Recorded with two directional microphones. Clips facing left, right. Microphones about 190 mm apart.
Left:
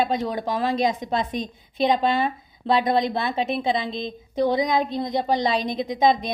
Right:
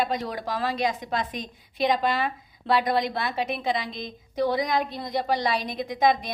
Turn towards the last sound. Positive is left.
turn(degrees=20)  # may be behind; listen again after turning